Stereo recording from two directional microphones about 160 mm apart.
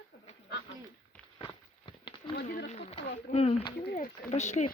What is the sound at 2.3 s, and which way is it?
Speech, 80° left.